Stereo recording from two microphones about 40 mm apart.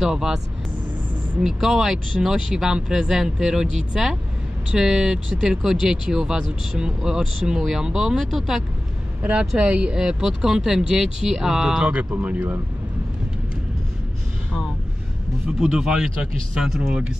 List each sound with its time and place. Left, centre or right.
0.0 s speech: centre
1.4 s speech: centre
9.2 s speech: right
9.9 s speech: centre
11.8 s speech: right
15.4 s speech: centre
16.5 s speech: centre